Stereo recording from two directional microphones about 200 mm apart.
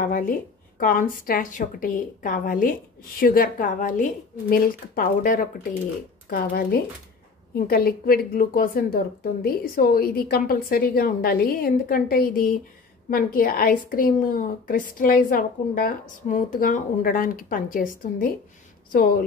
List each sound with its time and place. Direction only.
0.0 s speech: 45° left (ahead or behind)